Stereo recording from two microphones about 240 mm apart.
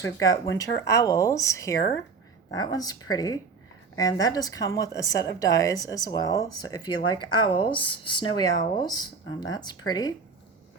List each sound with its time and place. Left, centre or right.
0.0 s speech: centre